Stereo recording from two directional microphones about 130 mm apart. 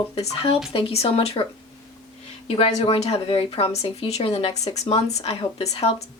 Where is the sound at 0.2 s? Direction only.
50° left (ahead or behind).